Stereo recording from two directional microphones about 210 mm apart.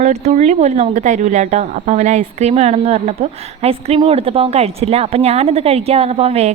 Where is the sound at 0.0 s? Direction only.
30° right (ahead or behind).